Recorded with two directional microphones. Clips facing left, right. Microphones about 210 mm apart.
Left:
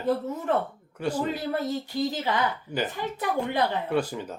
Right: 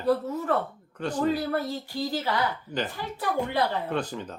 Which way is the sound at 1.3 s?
20° left (ahead or behind).